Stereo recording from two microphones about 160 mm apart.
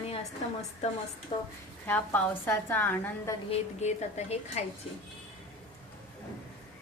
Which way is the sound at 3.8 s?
45° left (ahead or behind).